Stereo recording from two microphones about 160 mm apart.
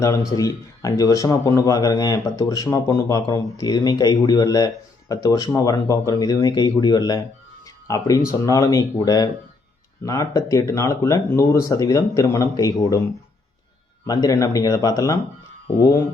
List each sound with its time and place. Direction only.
0.3 s speech: 20° left (ahead or behind)
14.1 s speech: 20° left (ahead or behind)